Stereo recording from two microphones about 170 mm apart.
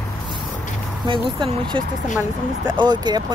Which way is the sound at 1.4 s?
30° right (ahead or behind).